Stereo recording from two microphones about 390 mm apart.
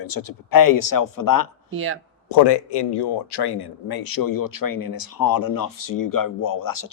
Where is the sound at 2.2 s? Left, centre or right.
Left.